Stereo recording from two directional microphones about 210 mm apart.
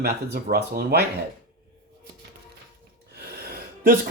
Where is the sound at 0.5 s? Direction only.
50° right (ahead or behind).